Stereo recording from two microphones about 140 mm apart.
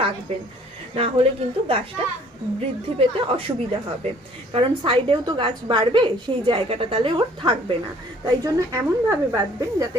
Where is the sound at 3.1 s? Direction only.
35° right (ahead or behind).